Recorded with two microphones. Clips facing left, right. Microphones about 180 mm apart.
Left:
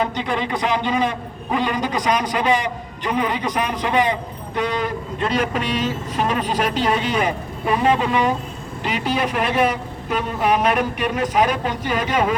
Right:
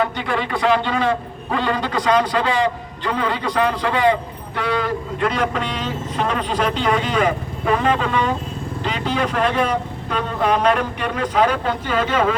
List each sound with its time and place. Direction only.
0.0 s a man's voice: 20° left (ahead or behind)